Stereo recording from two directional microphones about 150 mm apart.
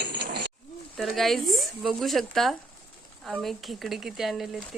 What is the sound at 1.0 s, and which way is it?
Speech, centre (ahead or behind).